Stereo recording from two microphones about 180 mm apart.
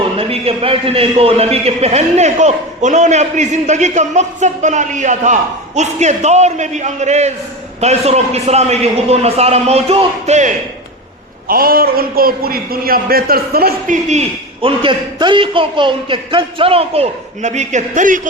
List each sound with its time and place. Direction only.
0.2 s a man's voice: 30° right (ahead or behind)
11.4 s a man's voice: 55° right (ahead or behind)